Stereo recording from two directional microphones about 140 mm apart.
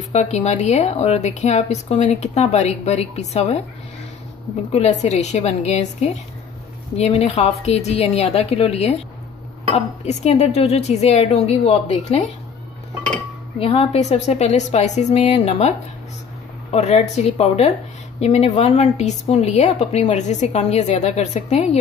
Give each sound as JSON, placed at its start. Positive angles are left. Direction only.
{"t": 0.1, "sound": "a woman's voice", "side_deg": 50}
{"t": 4.7, "sound": "a woman's voice", "side_deg": 55}
{"t": 10.0, "sound": "a woman's voice", "side_deg": 55}
{"t": 13.6, "sound": "a woman's voice", "side_deg": 45}
{"t": 16.7, "sound": "a woman's voice", "side_deg": 50}